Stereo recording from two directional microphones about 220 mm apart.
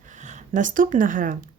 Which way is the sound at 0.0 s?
35° right (ahead or behind).